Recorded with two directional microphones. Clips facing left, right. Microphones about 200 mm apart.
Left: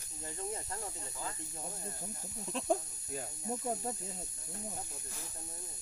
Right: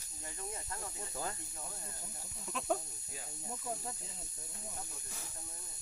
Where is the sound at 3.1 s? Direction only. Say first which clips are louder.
Left 9 dB; 45° left (ahead or behind).